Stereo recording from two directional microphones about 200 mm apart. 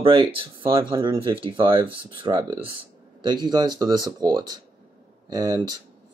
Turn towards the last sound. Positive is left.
turn(degrees=-20)  # may be behind; listen again after turning